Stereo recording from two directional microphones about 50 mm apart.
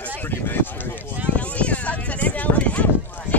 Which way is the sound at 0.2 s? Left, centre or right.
Left.